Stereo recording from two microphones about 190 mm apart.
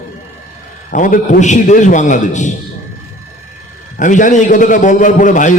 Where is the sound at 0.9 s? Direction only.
45° left (ahead or behind).